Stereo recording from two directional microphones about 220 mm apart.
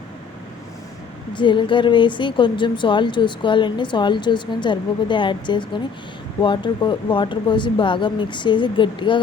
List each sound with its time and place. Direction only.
1.3 s a woman's voice: 20° left (ahead or behind)